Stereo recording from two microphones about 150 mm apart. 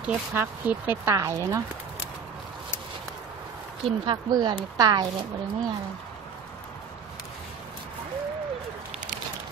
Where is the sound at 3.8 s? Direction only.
30° right (ahead or behind).